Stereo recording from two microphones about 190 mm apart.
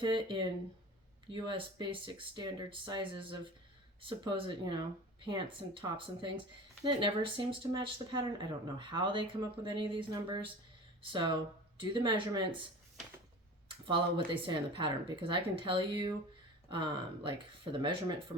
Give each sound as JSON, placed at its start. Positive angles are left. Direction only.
{"t": 0.0, "sound": "speech", "side_deg": -25}
{"t": 6.8, "sound": "speech", "side_deg": -25}
{"t": 13.8, "sound": "speech", "side_deg": -25}